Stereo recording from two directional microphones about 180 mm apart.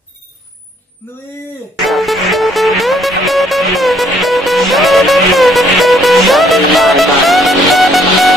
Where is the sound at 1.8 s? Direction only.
Centre (ahead or behind).